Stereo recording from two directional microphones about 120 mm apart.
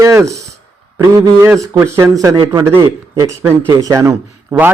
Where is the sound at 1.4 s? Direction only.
25° right (ahead or behind).